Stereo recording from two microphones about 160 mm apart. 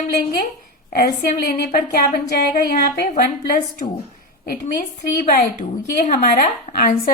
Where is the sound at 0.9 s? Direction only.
70° left (ahead or behind).